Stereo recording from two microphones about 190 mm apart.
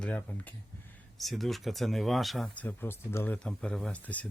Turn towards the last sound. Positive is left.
turn(degrees=5)  # may be behind; listen again after turning